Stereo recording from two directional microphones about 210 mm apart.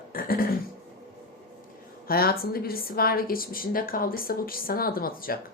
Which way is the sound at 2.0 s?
45° left (ahead or behind).